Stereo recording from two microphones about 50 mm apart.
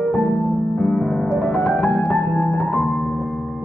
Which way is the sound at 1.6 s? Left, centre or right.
Left.